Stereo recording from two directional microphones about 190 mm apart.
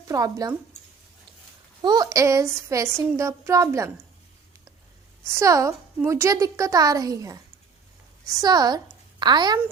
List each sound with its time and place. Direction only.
0.1 s speech: 20° right (ahead or behind)
1.8 s a woman's voice: 20° right (ahead or behind)
5.2 s a woman's voice: 15° right (ahead or behind)
8.4 s a woman's voice: 20° right (ahead or behind)